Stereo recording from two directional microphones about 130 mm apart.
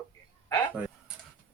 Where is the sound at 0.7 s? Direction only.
10° right (ahead or behind).